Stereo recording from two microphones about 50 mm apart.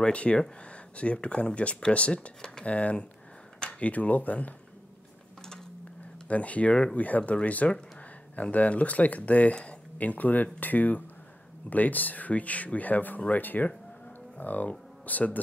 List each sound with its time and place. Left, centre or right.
0.0 s speech: left
6.2 s speech: left
7.0 s speech: left